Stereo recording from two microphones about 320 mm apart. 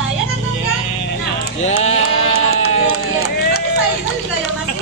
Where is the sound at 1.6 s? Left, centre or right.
Centre.